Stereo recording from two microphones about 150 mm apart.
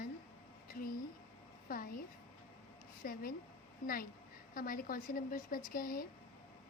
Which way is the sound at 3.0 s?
65° left (ahead or behind).